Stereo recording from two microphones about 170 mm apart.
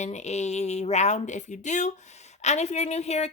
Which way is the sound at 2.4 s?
40° left (ahead or behind).